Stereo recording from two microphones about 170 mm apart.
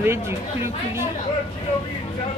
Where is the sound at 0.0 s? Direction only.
15° right (ahead or behind).